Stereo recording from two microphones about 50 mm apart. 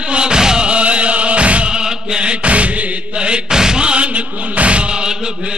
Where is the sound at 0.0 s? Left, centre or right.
Centre.